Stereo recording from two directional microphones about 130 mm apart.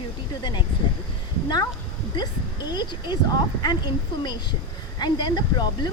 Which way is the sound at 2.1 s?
35° left (ahead or behind).